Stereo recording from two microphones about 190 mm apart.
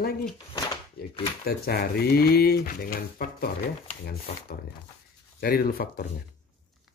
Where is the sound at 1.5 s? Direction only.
55° left (ahead or behind).